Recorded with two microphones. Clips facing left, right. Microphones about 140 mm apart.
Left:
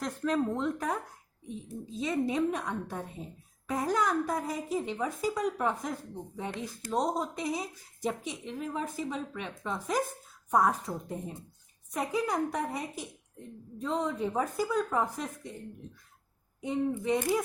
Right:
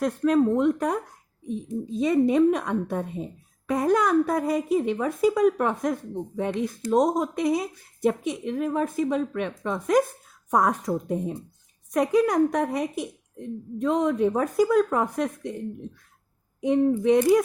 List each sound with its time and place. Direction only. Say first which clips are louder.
0.0 s a woman's voice: right 9 dB; 60° right (ahead or behind)
1.9 s a woman's voice: right 9 dB; 60° right (ahead or behind); by 11.3 s 80° right
11.9 s a woman's voice: right 10 dB; 65° right (ahead or behind)
16.6 s a woman's voice: right 9 dB; 70° right (ahead or behind)